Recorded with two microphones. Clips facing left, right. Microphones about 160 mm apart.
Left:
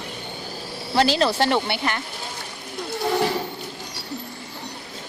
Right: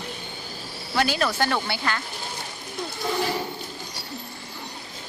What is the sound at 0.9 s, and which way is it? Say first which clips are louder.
Speech: left 4 dB; 30° left (ahead or behind).